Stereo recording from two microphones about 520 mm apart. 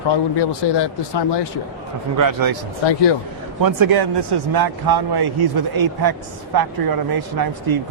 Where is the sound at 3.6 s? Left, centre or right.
Right.